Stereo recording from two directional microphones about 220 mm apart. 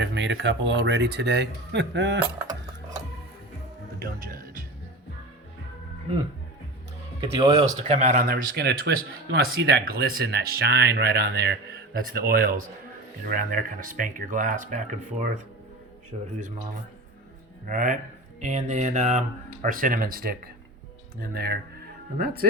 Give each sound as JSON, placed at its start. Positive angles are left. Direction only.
{"t": 0.0, "sound": "speech", "side_deg": -55}
{"t": 4.0, "sound": "speech", "side_deg": -40}
{"t": 7.2, "sound": "speech", "side_deg": -20}
{"t": 7.9, "sound": "speech", "side_deg": -30}
{"t": 17.7, "sound": "speech", "side_deg": -35}